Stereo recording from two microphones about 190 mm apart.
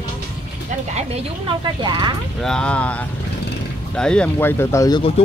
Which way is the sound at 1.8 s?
25° right (ahead or behind).